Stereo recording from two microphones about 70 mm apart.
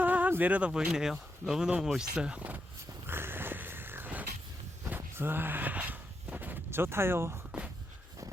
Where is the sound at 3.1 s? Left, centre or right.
Right.